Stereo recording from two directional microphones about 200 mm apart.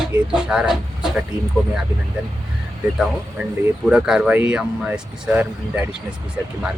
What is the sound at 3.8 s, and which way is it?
Speech, 5° right (ahead or behind).